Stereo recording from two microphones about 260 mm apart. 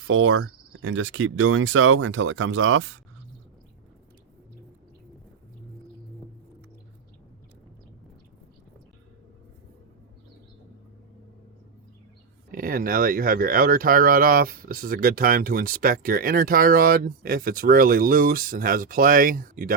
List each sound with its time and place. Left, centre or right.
0.1 s speech: right
12.5 s speech: right